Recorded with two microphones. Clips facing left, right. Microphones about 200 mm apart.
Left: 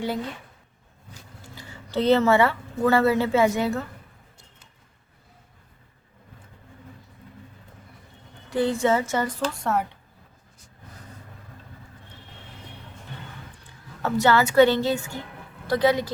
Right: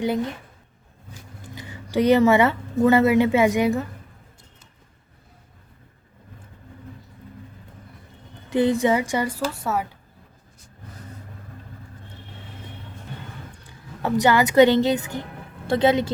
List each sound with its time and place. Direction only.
1.5 s speech: 20° right (ahead or behind)
8.4 s a woman's voice: 20° right (ahead or behind); by 9.8 s 5° right (ahead or behind)
14.0 s speech: 15° right (ahead or behind)